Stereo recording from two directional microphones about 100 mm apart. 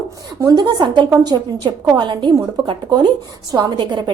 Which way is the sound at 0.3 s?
40° right (ahead or behind).